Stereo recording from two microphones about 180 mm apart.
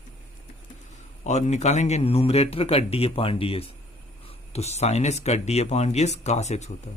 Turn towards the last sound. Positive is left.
turn(degrees=40)  # may be behind; listen again after turning